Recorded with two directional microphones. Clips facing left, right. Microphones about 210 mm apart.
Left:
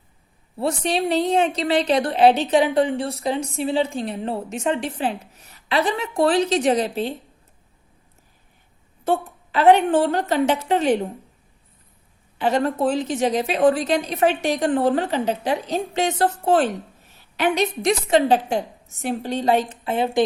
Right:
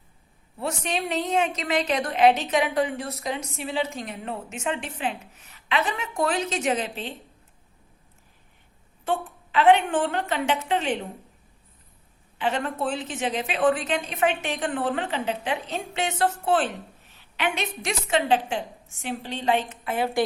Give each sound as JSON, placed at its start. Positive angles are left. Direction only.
{"t": 0.5, "sound": "a woman's voice", "side_deg": 35}
{"t": 9.0, "sound": "a woman's voice", "side_deg": 40}
{"t": 12.4, "sound": "a woman's voice", "side_deg": 40}